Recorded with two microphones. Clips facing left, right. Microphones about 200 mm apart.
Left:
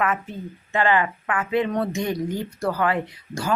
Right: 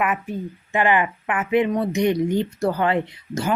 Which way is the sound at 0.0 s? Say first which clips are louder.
Right 1 dB; 15° right (ahead or behind).